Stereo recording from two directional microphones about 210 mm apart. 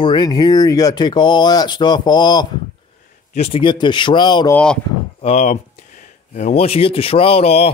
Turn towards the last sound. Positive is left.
turn(degrees=30)  # may be behind; listen again after turning